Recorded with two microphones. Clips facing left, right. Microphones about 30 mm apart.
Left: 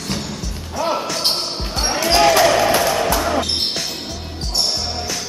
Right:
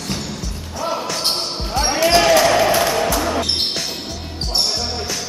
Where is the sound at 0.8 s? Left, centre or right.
Centre.